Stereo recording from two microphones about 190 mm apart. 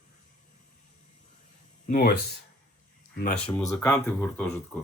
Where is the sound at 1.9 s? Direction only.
55° left (ahead or behind).